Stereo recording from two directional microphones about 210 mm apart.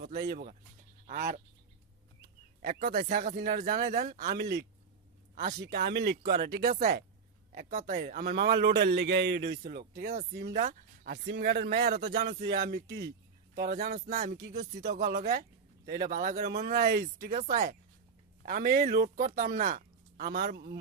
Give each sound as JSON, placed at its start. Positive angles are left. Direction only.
{"t": 0.3, "sound": "a man's voice", "side_deg": -40}
{"t": 2.6, "sound": "a man's voice", "side_deg": -50}
{"t": 5.6, "sound": "a man's voice", "side_deg": -50}